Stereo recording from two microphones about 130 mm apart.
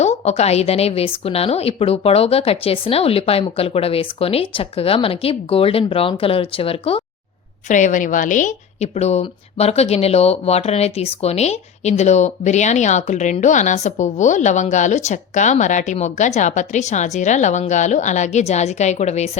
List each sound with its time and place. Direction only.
0.0 s a woman's voice: 60° left (ahead or behind)
7.7 s a woman's voice: 75° left (ahead or behind); by 19.3 s 60° left (ahead or behind)